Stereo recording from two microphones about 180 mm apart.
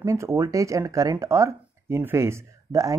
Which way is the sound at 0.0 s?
15° right (ahead or behind).